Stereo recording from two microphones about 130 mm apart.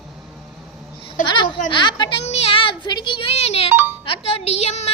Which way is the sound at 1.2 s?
35° left (ahead or behind).